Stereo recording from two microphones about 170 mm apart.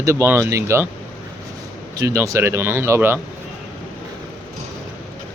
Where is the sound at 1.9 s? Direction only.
20° right (ahead or behind).